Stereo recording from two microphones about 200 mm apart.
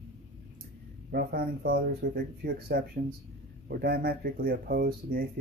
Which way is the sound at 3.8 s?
50° right (ahead or behind).